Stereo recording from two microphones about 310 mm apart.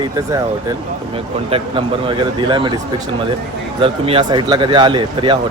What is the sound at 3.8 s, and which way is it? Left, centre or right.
Speech, centre.